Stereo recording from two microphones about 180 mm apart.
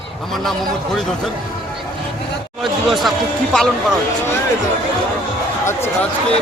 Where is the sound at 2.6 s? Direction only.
Centre (ahead or behind).